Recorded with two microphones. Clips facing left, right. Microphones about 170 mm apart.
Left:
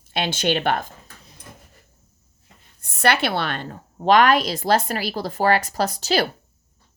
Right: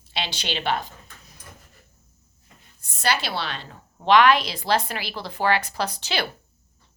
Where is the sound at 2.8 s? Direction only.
60° left (ahead or behind).